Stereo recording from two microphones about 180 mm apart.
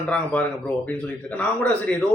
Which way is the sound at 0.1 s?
5° left (ahead or behind).